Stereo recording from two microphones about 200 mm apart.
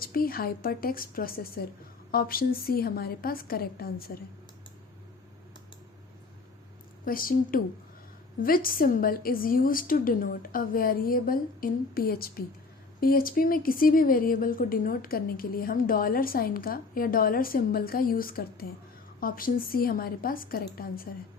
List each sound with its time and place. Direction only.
0.0 s a woman's voice: 45° left (ahead or behind)
7.0 s speech: 45° left (ahead or behind)